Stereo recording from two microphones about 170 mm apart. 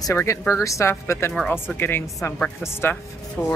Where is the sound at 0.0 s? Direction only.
15° left (ahead or behind).